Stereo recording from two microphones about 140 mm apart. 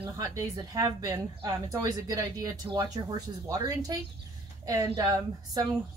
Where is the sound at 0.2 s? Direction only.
25° right (ahead or behind).